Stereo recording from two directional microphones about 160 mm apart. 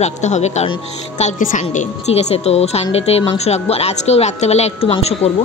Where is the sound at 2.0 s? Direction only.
40° left (ahead or behind).